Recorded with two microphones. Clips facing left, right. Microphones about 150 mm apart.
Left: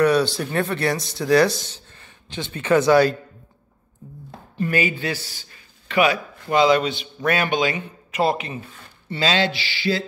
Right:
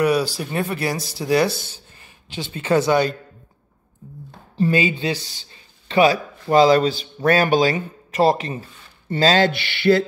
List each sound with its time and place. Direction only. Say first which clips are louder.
0.0 s a sound: left 1 dB; 10° right (ahead or behind)
0.4 s speech: left 1 dB; 10° right (ahead or behind)
1.1 s speech: left 2 dB; 30° right (ahead or behind)
2.5 s speech: left 2 dB; 30° right (ahead or behind)
4.6 s a man's voice: right 3 dB; 25° right (ahead or behind); by 10.0 s 60° right (ahead or behind)